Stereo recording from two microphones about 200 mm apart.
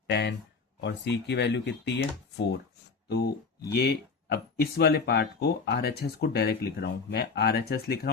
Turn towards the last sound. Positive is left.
turn(degrees=50)  # may be behind; listen again after turning